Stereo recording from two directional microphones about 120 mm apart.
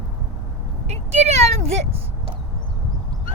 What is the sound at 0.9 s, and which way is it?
Speech, 65° right (ahead or behind).